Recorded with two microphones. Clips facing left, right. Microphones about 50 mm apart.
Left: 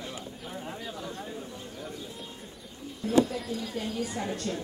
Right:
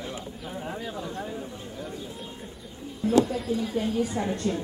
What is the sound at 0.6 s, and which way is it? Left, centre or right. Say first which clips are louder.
Speech: right 6 dB; centre.